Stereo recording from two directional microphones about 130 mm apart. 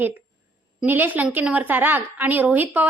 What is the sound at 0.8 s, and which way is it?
A woman's voice, 15° right (ahead or behind).